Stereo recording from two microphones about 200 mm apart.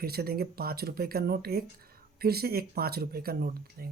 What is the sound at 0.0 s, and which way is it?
Speech, 50° right (ahead or behind).